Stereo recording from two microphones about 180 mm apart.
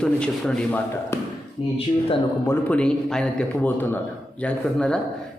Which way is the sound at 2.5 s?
10° left (ahead or behind).